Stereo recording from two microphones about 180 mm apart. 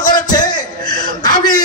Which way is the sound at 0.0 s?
20° left (ahead or behind).